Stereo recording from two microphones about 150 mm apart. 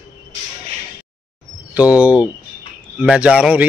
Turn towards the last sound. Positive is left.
turn(degrees=-5)  # may be behind; listen again after turning